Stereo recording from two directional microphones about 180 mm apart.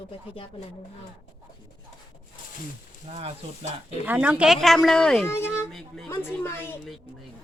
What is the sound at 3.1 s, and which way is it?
Speech, 35° right (ahead or behind).